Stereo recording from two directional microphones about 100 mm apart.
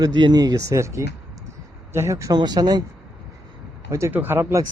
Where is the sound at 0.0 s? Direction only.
45° right (ahead or behind); by 2.3 s 30° right (ahead or behind).